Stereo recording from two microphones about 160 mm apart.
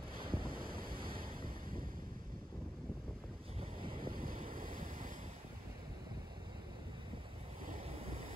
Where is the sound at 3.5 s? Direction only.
30° right (ahead or behind).